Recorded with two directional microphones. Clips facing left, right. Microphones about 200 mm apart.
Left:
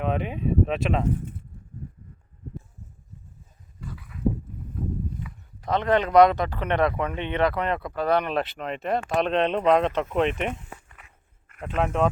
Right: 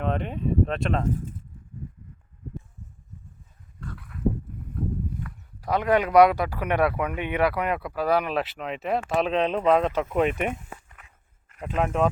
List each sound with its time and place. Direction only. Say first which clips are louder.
0.0 s speech: left 1 dB; 5° left (ahead or behind)
3.8 s dog: even; 5° left (ahead or behind)
5.6 s speech: even; 10° right (ahead or behind)